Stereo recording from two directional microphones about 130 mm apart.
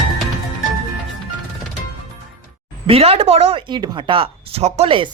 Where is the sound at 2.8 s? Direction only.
50° right (ahead or behind).